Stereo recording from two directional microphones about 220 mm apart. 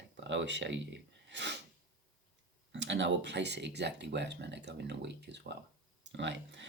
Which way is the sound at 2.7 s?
55° right (ahead or behind).